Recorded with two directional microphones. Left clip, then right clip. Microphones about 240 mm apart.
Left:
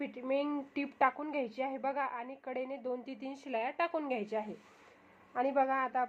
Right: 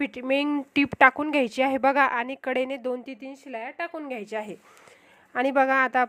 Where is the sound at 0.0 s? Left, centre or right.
Right.